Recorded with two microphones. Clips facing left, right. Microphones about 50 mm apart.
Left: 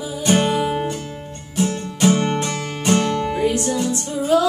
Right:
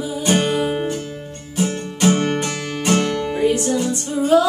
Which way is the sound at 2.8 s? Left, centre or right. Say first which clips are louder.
Even; centre.